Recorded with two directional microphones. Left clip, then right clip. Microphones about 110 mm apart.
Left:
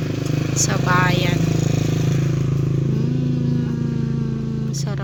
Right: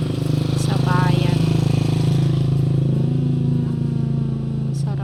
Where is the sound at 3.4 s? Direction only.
Centre (ahead or behind).